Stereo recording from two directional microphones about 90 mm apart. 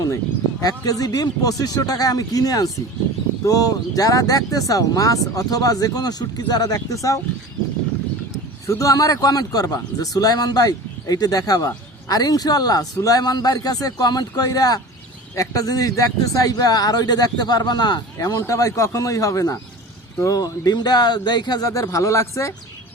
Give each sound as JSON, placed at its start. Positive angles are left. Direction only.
{"t": 0.6, "sound": "a man's voice", "side_deg": 45}
{"t": 8.3, "sound": "a man's voice", "side_deg": 35}
{"t": 21.7, "sound": "a man's voice", "side_deg": 35}